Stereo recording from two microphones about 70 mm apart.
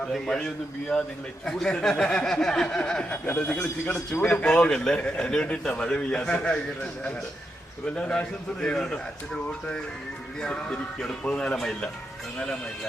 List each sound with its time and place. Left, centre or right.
0.0 s a man's voice: centre
3.1 s a man's voice: left
7.9 s a man's voice: centre